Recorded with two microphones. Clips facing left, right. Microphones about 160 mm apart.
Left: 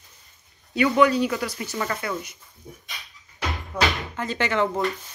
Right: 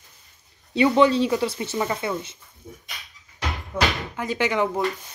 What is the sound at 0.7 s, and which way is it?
Speech, 25° right (ahead or behind).